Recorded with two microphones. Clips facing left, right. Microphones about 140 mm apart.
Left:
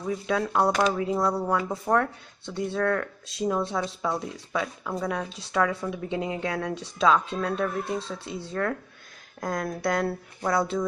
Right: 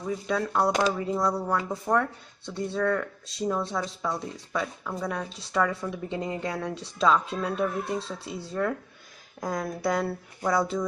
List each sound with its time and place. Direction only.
0.0 s speech: 5° left (ahead or behind)